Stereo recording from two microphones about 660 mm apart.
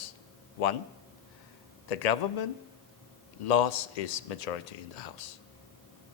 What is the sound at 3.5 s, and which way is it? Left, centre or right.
Speech, left.